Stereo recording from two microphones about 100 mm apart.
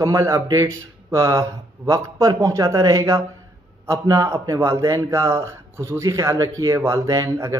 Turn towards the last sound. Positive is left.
turn(degrees=-30)  # may be behind; listen again after turning